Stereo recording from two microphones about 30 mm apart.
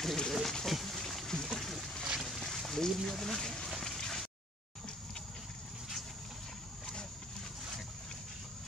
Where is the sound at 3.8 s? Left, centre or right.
Centre.